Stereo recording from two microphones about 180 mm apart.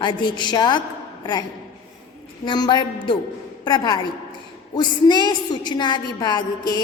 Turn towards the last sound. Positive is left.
turn(degrees=25)  # may be behind; listen again after turning